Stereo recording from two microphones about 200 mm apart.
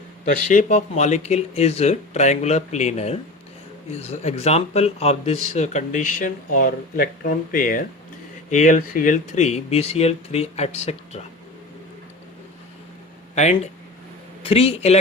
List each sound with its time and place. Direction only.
0.3 s speech: 40° left (ahead or behind)
13.3 s a man's voice: 35° left (ahead or behind)